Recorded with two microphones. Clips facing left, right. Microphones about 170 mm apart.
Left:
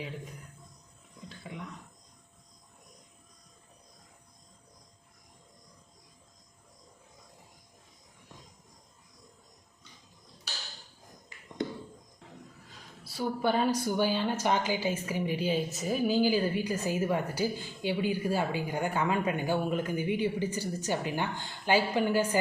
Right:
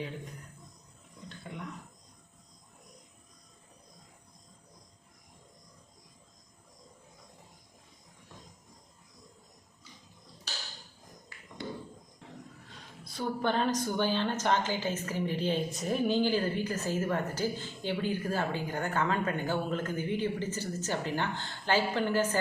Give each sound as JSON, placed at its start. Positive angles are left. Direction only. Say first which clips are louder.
{"t": 1.5, "sound": "speech", "louder": "left 1 dB", "side_deg": 5}
{"t": 11.3, "sound": "a sound", "louder": "even", "side_deg": 20}
{"t": 12.6, "sound": "a woman's voice", "louder": "right 1 dB", "side_deg": 5}